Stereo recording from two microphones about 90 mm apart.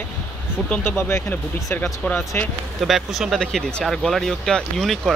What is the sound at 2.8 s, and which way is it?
Speech, 5° right (ahead or behind).